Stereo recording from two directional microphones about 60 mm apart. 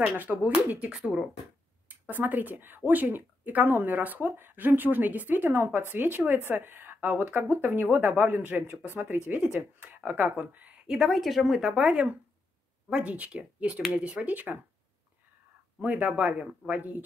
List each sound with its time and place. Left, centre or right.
0.0 s a woman's voice: right
9.3 s a woman's voice: right
9.9 s a woman's voice: right
10.9 s speech: centre
11.8 s a woman's voice: right
14.3 s a woman's voice: right
15.8 s a woman's voice: right